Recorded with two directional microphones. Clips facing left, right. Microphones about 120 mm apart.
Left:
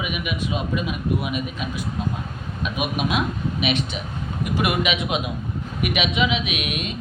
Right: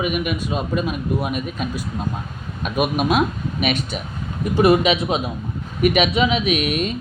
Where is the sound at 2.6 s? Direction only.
45° right (ahead or behind).